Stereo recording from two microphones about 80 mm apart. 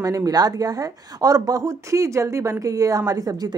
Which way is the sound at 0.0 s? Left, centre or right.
Right.